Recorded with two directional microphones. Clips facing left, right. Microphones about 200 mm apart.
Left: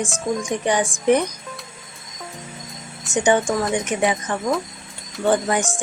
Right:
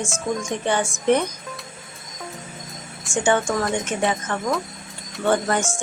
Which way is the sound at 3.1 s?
15° left (ahead or behind).